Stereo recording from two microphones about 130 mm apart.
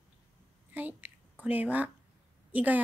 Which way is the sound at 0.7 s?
15° right (ahead or behind).